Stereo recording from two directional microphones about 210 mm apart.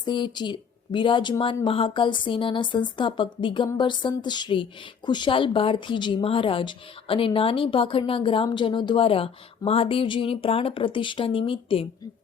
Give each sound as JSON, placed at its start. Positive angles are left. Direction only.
{"t": 0.0, "sound": "speech", "side_deg": 20}